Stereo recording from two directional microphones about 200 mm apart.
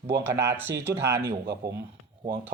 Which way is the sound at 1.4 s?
55° right (ahead or behind).